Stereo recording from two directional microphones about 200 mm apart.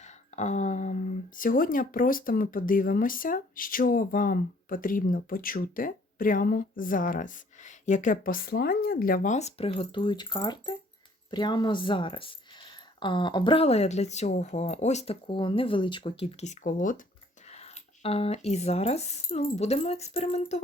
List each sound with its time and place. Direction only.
0.0 s speech: 35° left (ahead or behind)
17.5 s speech: 30° left (ahead or behind)